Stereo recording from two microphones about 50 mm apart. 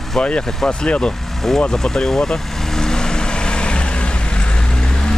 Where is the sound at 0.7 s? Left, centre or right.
Left.